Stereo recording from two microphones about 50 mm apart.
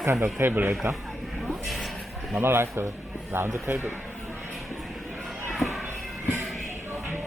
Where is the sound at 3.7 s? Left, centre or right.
Right.